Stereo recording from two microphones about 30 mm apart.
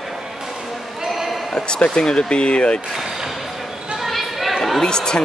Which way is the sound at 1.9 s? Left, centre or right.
Left.